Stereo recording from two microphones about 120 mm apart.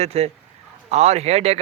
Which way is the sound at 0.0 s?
60° right (ahead or behind).